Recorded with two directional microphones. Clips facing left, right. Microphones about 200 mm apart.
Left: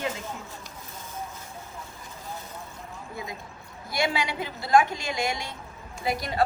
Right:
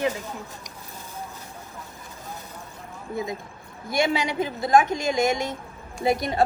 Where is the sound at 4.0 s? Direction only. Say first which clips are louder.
Right 4 dB; 20° right (ahead or behind).